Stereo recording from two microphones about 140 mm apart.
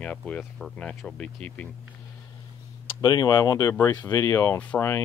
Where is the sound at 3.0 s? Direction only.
30° left (ahead or behind).